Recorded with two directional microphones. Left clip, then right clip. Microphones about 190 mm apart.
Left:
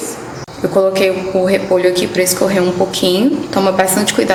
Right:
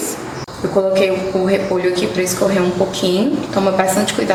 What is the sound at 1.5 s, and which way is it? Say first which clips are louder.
Speech: left 5 dB; 50° left (ahead or behind).